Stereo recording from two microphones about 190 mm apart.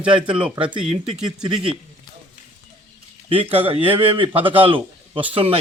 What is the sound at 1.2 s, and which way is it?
Speech, 25° right (ahead or behind).